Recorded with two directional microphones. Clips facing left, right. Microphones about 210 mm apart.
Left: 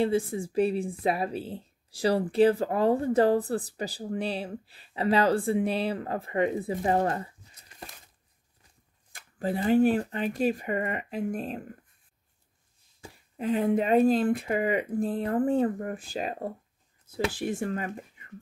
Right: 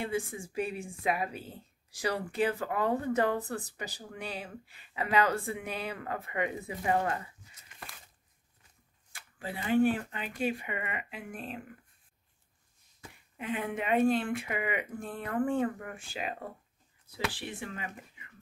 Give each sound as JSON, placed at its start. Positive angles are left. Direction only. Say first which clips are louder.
{"t": 0.0, "sound": "a woman's voice", "louder": "left 8 dB", "side_deg": 35}
{"t": 9.1, "sound": "a woman's voice", "louder": "left 10 dB", "side_deg": 40}
{"t": 13.0, "sound": "a woman's voice", "louder": "left 9 dB", "side_deg": 35}